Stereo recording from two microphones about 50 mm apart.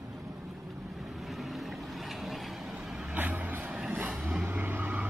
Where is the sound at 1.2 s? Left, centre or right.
Centre.